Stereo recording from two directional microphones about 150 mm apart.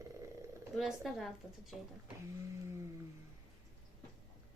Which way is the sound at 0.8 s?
Centre (ahead or behind).